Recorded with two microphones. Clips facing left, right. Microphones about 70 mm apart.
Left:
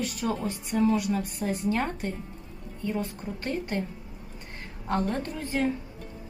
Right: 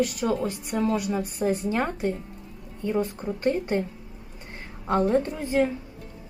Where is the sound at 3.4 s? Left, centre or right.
Right.